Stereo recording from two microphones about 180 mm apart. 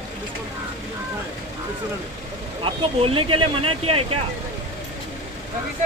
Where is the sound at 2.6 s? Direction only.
30° right (ahead or behind).